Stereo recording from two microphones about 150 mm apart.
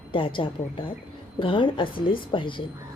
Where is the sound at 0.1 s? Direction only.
35° left (ahead or behind).